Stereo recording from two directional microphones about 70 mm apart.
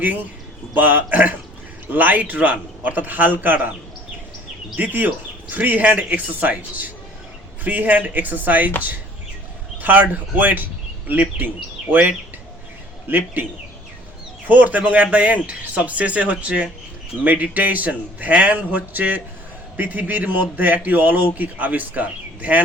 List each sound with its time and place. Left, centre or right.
0.7 s a man's voice: right
4.8 s a man's voice: right
9.8 s a man's voice: right
14.4 s a man's voice: right